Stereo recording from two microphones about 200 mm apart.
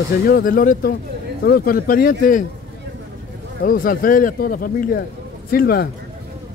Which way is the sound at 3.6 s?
45° left (ahead or behind).